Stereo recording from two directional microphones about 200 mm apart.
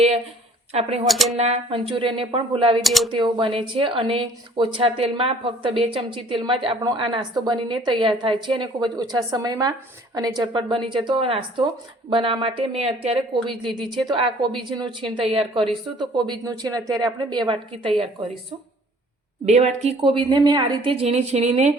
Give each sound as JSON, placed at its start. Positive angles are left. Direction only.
{"t": 0.7, "sound": "a woman's voice", "side_deg": -30}
{"t": 1.0, "sound": "speech", "side_deg": 0}
{"t": 1.4, "sound": "speech", "side_deg": -30}
{"t": 2.8, "sound": "speech", "side_deg": 0}
{"t": 3.1, "sound": "speech", "side_deg": -25}
{"t": 19.5, "sound": "a woman's voice", "side_deg": -35}